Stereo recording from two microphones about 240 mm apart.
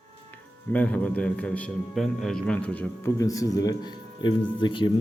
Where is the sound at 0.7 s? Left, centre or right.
Centre.